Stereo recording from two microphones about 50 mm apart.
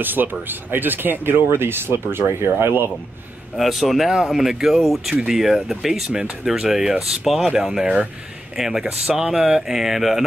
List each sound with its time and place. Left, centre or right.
0.0 s speech: right
3.5 s speech: centre
7.8 s speech: centre
8.5 s speech: centre